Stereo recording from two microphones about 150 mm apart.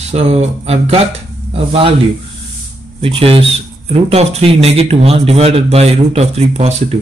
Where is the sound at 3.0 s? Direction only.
40° right (ahead or behind).